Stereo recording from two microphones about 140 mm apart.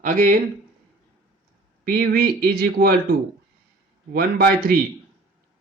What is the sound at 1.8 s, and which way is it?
A man's voice, 90° right.